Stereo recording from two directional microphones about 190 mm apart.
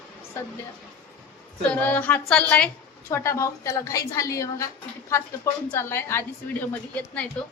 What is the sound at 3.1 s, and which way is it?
A woman's voice, 15° left (ahead or behind).